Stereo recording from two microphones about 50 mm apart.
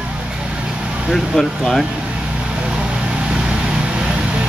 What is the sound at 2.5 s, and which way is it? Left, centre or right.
Vehicle, centre.